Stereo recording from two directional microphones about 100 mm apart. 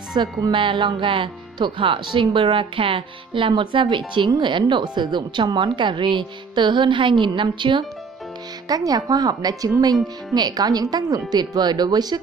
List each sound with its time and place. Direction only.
0.1 s speech: 45° right (ahead or behind)
8.6 s speech: 40° right (ahead or behind)